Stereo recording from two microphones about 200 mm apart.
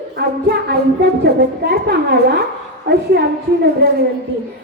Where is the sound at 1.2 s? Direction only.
50° right (ahead or behind).